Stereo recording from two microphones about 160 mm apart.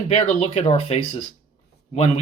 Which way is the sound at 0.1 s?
40° left (ahead or behind).